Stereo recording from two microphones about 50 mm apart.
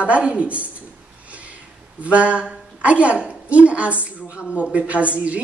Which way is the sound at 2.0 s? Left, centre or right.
Right.